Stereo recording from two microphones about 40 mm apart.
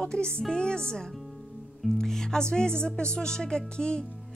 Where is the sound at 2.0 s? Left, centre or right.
Centre.